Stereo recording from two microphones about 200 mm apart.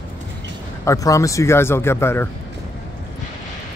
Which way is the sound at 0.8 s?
15° left (ahead or behind).